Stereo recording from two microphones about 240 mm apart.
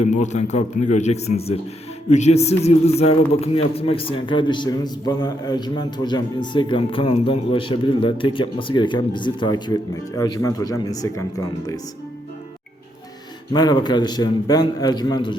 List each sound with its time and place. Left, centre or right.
0.0 s a man's voice: left; by 11.8 s centre
13.5 s a man's voice: centre